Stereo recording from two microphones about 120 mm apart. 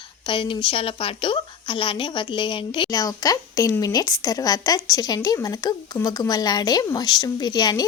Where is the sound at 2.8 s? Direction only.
30° left (ahead or behind).